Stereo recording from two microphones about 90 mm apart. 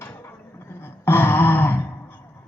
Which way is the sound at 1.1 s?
25° left (ahead or behind).